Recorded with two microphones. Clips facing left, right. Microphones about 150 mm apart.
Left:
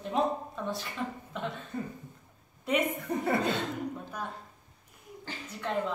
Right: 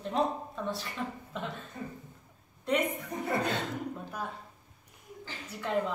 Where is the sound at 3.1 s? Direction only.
60° left (ahead or behind).